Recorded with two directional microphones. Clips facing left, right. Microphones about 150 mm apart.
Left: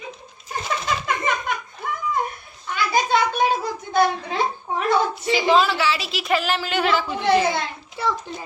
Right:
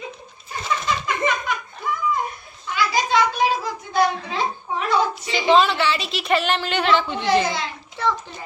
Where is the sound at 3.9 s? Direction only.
55° left (ahead or behind).